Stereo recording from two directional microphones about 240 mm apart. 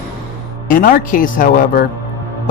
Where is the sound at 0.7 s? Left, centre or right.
Left.